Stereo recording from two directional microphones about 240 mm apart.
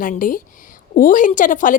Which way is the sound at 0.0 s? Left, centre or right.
Left.